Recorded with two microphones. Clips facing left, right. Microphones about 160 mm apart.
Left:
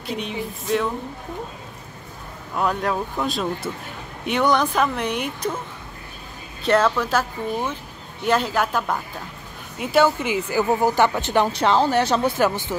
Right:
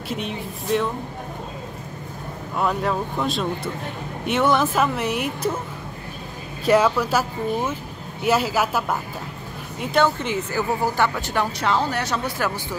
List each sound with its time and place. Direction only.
0.1 s speech: centre (ahead or behind)
2.5 s speech: centre (ahead or behind)
6.6 s speech: 10° right (ahead or behind)
9.8 s a woman's voice: 5° left (ahead or behind)
11.1 s speech: 25° left (ahead or behind)